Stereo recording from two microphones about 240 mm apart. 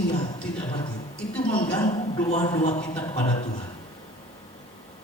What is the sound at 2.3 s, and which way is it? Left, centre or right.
Speech, left.